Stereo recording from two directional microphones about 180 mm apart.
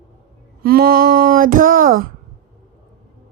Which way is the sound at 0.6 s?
55° right (ahead or behind).